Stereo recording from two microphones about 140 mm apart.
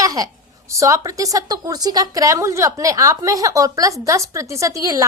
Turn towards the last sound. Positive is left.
turn(degrees=-25)  # may be behind; listen again after turning